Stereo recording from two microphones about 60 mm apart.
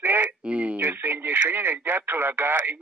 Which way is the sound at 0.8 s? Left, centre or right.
Right.